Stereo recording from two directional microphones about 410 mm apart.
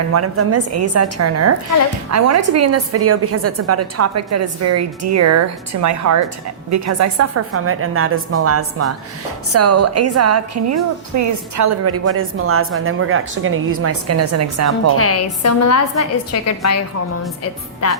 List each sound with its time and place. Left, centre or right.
0.1 s a woman's voice: right
14.9 s a woman's voice: left